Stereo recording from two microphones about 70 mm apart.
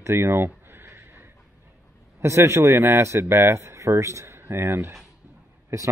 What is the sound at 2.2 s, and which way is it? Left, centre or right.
Speech, right.